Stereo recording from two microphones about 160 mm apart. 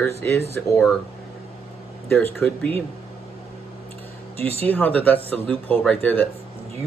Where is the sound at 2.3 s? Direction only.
10° left (ahead or behind).